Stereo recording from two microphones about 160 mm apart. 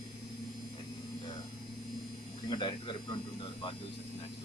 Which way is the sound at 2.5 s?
30° left (ahead or behind).